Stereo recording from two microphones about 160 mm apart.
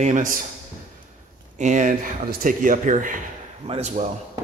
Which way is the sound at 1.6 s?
50° right (ahead or behind).